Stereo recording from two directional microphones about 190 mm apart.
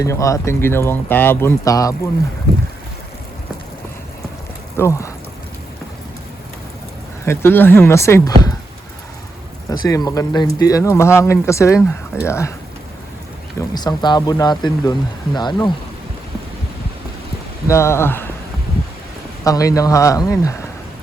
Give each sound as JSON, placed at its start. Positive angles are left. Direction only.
{"t": 0.0, "sound": "speech", "side_deg": 15}
{"t": 4.8, "sound": "speech", "side_deg": 15}
{"t": 7.3, "sound": "speech", "side_deg": 10}
{"t": 9.6, "sound": "speech", "side_deg": 20}
{"t": 13.6, "sound": "speech", "side_deg": 20}
{"t": 17.7, "sound": "speech", "side_deg": 15}
{"t": 19.5, "sound": "speech", "side_deg": 15}